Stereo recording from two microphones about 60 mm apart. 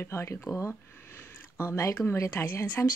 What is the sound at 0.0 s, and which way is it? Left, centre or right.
Speech, left.